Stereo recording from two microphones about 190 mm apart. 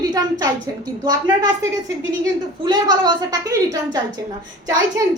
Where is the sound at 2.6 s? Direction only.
20° right (ahead or behind).